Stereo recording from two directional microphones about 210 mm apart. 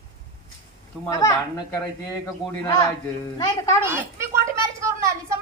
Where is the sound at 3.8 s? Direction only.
10° right (ahead or behind).